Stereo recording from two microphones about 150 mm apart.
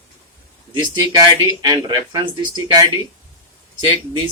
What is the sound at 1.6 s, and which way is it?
Speech, 30° right (ahead or behind).